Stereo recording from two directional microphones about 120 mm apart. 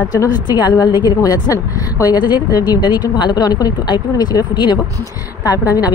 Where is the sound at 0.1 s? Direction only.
35° left (ahead or behind).